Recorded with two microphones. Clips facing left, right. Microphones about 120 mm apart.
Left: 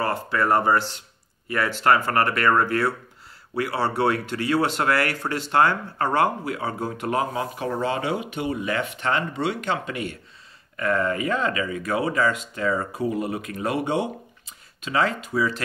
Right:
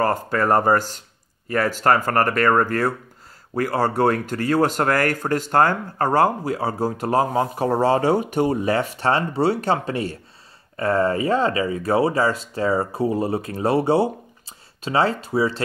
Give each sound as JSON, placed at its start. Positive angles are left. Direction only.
{"t": 0.0, "sound": "speech", "side_deg": -45}